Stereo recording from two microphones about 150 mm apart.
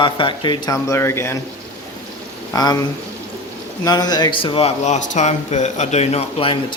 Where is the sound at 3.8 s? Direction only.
25° left (ahead or behind).